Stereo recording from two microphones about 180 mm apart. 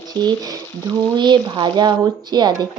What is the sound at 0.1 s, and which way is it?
Speech, 25° right (ahead or behind).